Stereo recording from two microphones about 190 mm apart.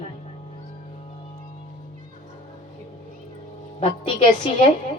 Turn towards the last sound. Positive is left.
turn(degrees=30)  # may be behind; listen again after turning